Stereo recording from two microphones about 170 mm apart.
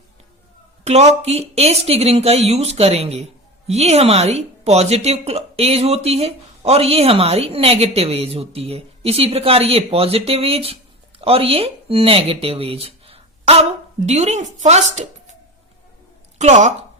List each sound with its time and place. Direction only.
0.9 s speech: 40° right (ahead or behind)
16.4 s speech: 45° right (ahead or behind)